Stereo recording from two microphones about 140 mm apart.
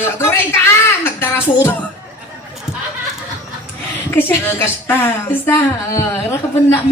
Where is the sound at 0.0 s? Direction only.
15° left (ahead or behind).